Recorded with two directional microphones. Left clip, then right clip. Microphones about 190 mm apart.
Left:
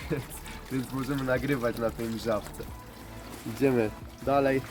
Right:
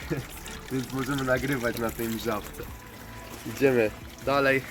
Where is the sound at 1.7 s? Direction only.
35° left (ahead or behind).